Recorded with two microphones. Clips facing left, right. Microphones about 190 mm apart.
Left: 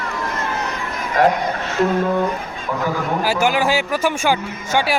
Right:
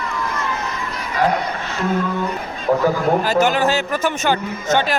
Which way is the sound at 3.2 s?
10° left (ahead or behind).